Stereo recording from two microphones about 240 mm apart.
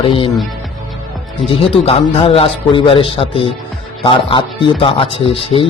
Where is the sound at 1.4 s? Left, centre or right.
Left.